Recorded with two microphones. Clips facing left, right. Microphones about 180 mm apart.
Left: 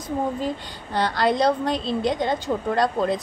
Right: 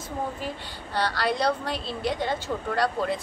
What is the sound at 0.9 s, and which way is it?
A woman's voice, 20° left (ahead or behind).